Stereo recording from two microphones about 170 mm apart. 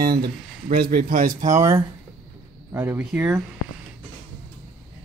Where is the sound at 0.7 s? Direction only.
60° right (ahead or behind).